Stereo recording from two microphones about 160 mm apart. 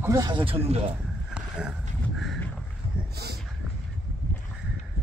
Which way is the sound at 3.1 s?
90° right.